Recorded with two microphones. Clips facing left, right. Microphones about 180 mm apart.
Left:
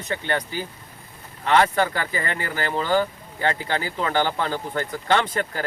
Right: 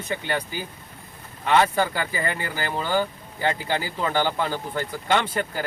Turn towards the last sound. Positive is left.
turn(degrees=-10)  # may be behind; listen again after turning